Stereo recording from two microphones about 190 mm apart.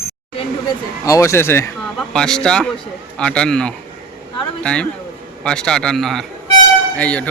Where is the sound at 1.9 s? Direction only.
5° left (ahead or behind).